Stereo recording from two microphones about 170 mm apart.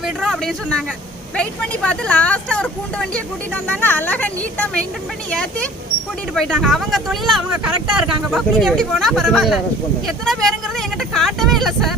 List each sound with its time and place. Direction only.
0.2 s speech: centre (ahead or behind)